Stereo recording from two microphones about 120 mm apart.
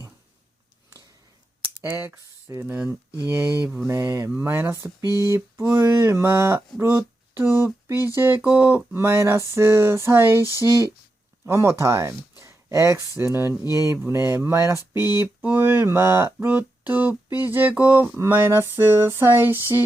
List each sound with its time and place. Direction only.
1.8 s speech: 15° right (ahead or behind)
10.4 s speech: 30° left (ahead or behind)
11.4 s speech: 25° right (ahead or behind)
15.2 s music: 15° right (ahead or behind)